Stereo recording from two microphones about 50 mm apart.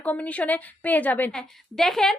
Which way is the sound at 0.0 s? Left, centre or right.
Left.